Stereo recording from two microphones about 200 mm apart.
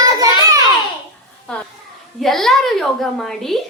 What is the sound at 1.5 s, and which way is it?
A child's voice, 5° left (ahead or behind).